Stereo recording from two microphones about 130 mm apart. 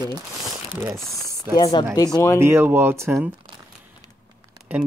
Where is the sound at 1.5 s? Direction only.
30° left (ahead or behind).